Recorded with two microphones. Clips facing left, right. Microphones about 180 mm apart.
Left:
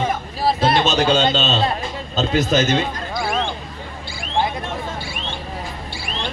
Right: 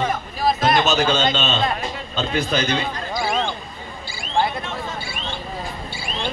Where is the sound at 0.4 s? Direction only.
30° left (ahead or behind).